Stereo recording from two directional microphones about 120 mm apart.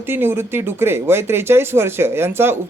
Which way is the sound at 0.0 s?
20° right (ahead or behind).